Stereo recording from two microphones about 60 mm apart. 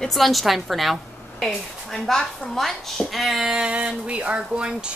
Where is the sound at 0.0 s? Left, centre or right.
Centre.